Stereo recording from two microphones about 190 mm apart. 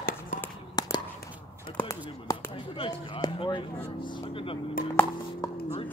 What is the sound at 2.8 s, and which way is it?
Speech, 25° left (ahead or behind).